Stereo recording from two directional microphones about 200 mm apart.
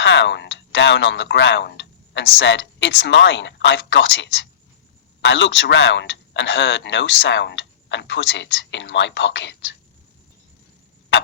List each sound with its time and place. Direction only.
0.0 s speech: 65° left (ahead or behind)